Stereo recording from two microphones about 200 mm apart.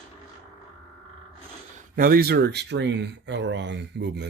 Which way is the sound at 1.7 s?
45° right (ahead or behind).